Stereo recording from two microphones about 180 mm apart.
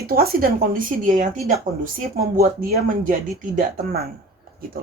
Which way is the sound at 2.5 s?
50° right (ahead or behind).